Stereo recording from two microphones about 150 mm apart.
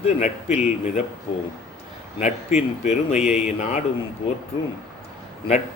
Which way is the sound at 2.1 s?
50° left (ahead or behind).